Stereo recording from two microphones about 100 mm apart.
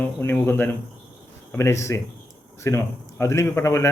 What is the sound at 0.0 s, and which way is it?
A man's voice, 20° left (ahead or behind).